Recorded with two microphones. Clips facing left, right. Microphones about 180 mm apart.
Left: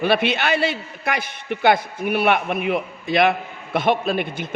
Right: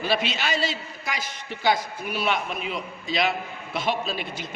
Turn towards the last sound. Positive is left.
turn(degrees=55)  # may be behind; listen again after turning